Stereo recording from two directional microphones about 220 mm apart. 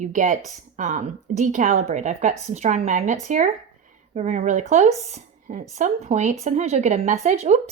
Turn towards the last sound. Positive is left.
turn(degrees=-30)  # may be behind; listen again after turning